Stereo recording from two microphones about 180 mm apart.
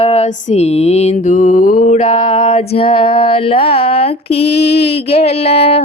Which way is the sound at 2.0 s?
30° left (ahead or behind).